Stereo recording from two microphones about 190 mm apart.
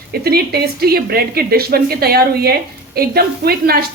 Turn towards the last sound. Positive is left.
turn(degrees=-55)  # may be behind; listen again after turning